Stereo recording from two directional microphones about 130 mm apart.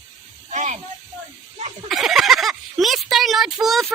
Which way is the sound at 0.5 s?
65° right (ahead or behind).